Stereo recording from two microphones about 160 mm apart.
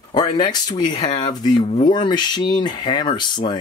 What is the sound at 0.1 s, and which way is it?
Speech, 25° left (ahead or behind).